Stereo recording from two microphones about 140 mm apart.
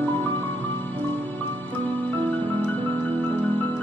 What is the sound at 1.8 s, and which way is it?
Music, 10° left (ahead or behind).